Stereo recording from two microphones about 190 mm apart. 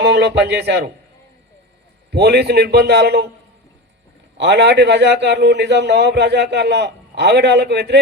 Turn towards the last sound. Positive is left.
turn(degrees=-60)  # may be behind; listen again after turning